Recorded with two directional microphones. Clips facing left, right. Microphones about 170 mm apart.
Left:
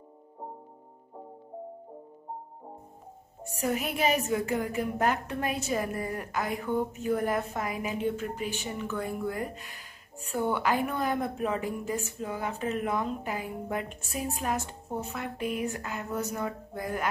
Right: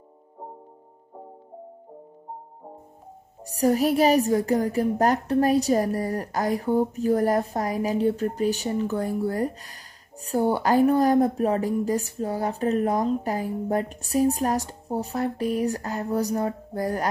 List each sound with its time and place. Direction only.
3.4 s a woman's voice: 35° right (ahead or behind)